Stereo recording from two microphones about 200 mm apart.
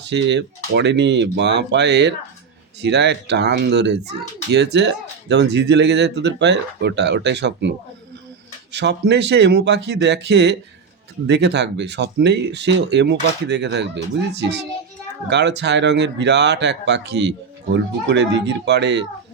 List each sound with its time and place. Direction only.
0.0 s speech: 60° right (ahead or behind)
8.7 s speech: 60° right (ahead or behind)